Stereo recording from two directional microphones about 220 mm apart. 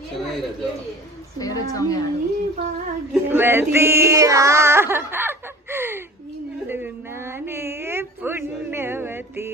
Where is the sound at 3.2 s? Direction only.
10° right (ahead or behind).